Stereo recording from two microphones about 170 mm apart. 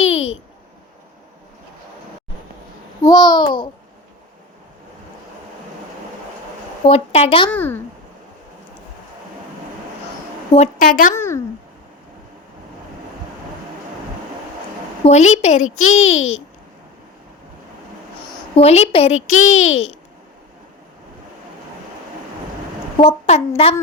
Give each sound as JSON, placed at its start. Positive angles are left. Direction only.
{"t": 0.0, "sound": "a sound", "side_deg": 40}
{"t": 3.0, "sound": "a child's voice", "side_deg": 25}
{"t": 6.8, "sound": "a woman's voice", "side_deg": 35}
{"t": 7.5, "sound": "speech", "side_deg": 10}
{"t": 10.8, "sound": "a woman's voice", "side_deg": 55}
{"t": 11.1, "sound": "speech", "side_deg": 15}
{"t": 15.0, "sound": "a woman's voice", "side_deg": 40}
{"t": 18.5, "sound": "a woman's voice", "side_deg": 40}
{"t": 23.0, "sound": "a woman's voice", "side_deg": 35}